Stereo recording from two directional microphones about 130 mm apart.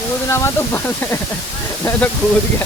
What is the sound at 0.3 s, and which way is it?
Speech, 20° left (ahead or behind).